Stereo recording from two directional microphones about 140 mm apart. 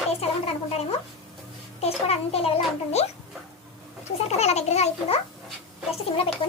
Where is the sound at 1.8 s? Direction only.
45° left (ahead or behind).